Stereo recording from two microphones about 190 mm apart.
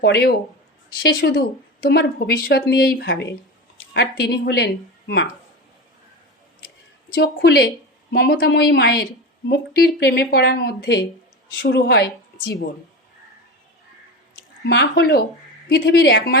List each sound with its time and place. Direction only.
0.0 s a woman's voice: 55° left (ahead or behind)
7.3 s a woman's voice: 55° left (ahead or behind)
14.6 s a woman's voice: 60° left (ahead or behind)